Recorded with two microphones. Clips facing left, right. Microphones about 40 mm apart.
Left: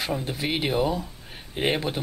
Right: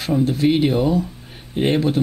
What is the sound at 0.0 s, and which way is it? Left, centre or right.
Speech, centre.